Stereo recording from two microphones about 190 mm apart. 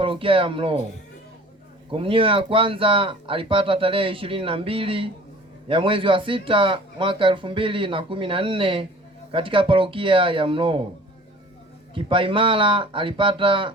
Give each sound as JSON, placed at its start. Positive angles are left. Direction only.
{"t": 0.0, "sound": "speech", "side_deg": -25}
{"t": 1.9, "sound": "speech", "side_deg": -30}
{"t": 11.9, "sound": "speech", "side_deg": -25}